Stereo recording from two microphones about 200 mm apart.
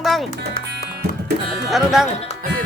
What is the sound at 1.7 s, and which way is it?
Speech, centre (ahead or behind).